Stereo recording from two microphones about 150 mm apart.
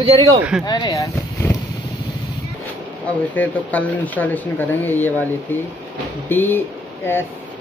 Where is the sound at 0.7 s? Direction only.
25° left (ahead or behind).